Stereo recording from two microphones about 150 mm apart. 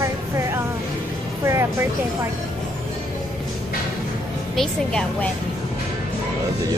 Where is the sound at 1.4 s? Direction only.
20° right (ahead or behind).